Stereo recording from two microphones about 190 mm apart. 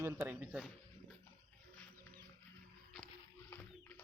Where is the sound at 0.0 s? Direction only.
10° right (ahead or behind).